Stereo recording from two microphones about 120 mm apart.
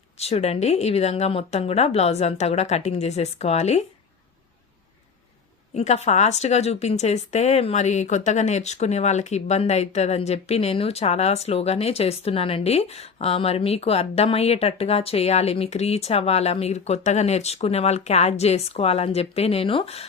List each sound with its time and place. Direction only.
0.2 s a woman's voice: 60° left (ahead or behind)
5.7 s a woman's voice: 65° left (ahead or behind)